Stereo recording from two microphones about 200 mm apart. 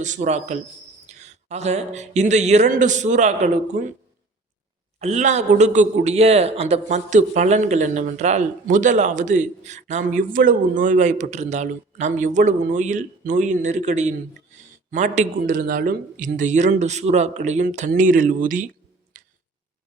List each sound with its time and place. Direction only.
0.0 s a man's voice: 35° right (ahead or behind)
4.9 s a man's voice: 35° right (ahead or behind)
19.1 s tick: 40° right (ahead or behind)